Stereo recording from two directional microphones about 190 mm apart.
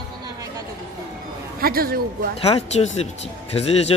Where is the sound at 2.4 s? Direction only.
30° left (ahead or behind).